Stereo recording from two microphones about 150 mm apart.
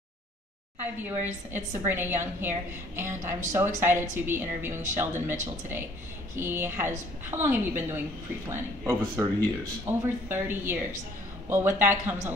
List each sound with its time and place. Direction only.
1.0 s speech: 15° right (ahead or behind)